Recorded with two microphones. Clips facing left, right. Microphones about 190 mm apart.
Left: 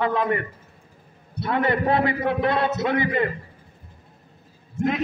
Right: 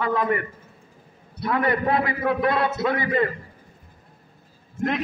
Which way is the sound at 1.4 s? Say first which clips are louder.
Left 1 dB; 25° left (ahead or behind).